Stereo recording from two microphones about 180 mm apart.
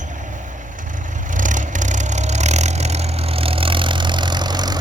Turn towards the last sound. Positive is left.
turn(degrees=-25)  # may be behind; listen again after turning